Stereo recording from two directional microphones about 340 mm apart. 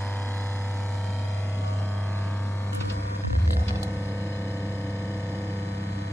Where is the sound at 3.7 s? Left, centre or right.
Centre.